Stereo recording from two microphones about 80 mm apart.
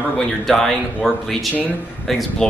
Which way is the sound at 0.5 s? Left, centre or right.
Centre.